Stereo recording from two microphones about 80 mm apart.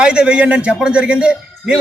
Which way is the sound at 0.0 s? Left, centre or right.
Centre.